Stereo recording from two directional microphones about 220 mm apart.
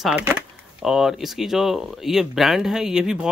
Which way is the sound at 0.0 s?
10° right (ahead or behind).